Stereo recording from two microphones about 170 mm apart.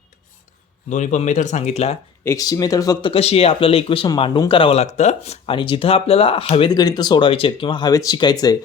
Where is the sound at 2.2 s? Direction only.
20° left (ahead or behind).